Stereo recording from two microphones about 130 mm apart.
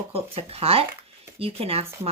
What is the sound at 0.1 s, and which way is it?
Speech, 50° right (ahead or behind).